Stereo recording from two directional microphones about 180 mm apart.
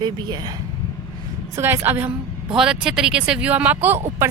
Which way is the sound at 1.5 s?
15° right (ahead or behind).